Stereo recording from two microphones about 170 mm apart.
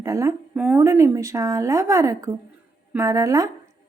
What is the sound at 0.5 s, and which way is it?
A woman's voice, 15° right (ahead or behind).